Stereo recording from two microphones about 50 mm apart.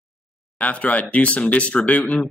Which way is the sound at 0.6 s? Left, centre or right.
Left.